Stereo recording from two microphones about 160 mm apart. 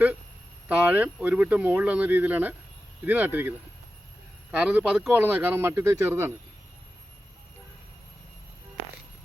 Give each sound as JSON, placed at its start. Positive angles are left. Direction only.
{"t": 0.7, "sound": "speech", "side_deg": -10}
{"t": 4.5, "sound": "speech", "side_deg": -10}